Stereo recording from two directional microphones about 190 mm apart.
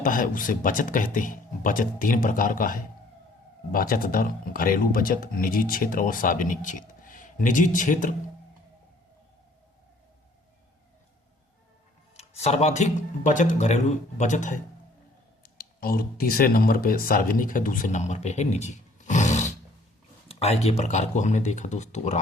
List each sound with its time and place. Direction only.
0.0 s speech: 45° left (ahead or behind)
12.1 s speech: 35° left (ahead or behind)
15.4 s speech: 50° left (ahead or behind)